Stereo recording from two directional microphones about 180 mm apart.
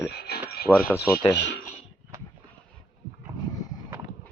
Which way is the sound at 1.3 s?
75° left (ahead or behind).